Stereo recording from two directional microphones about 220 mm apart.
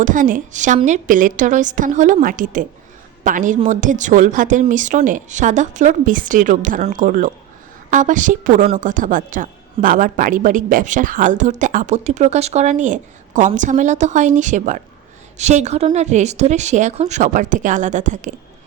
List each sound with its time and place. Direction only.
0.0 s speech: 35° right (ahead or behind)